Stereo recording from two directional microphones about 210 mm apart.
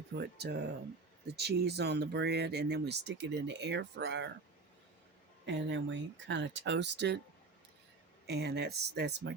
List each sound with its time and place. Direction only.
0.2 s speech: 50° right (ahead or behind)
5.5 s speech: 60° right (ahead or behind)
8.3 s speech: 50° right (ahead or behind)